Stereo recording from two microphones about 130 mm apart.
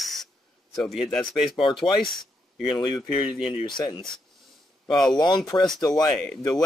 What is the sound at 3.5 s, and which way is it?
Speech, 35° left (ahead or behind).